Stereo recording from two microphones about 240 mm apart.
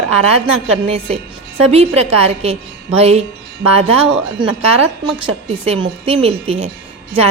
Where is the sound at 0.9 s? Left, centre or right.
Right.